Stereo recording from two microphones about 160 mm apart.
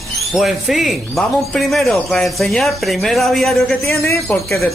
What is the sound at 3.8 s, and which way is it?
Speech, 15° left (ahead or behind).